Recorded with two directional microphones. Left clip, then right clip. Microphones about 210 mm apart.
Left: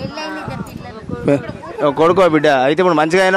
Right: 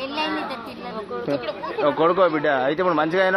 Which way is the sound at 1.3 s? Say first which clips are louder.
Left 10 dB; 65° left (ahead or behind).